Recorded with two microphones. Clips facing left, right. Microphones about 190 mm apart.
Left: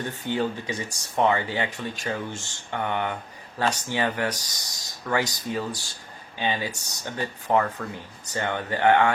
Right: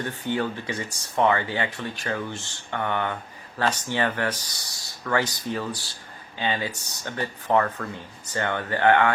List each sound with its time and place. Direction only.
0.3 s speech: 15° left (ahead or behind)